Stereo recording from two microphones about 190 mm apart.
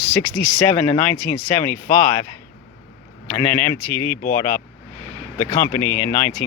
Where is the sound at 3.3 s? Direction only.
10° left (ahead or behind).